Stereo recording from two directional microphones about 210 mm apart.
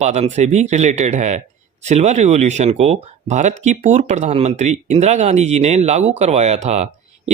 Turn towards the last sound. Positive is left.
turn(degrees=-30)  # may be behind; listen again after turning